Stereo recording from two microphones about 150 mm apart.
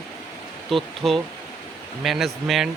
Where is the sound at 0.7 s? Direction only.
Centre (ahead or behind).